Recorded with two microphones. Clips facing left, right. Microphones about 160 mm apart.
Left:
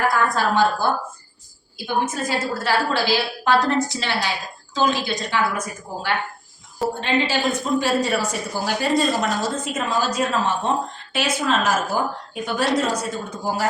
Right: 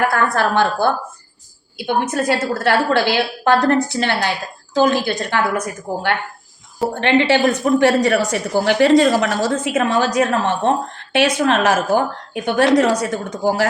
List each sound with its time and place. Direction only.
0.1 s a woman's voice: 65° right (ahead or behind)